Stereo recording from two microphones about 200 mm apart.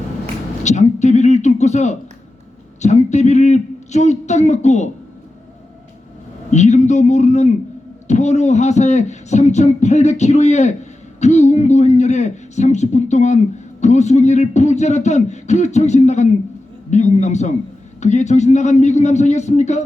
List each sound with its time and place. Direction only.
0.6 s speech: 35° left (ahead or behind)
6.5 s speech: 35° left (ahead or behind)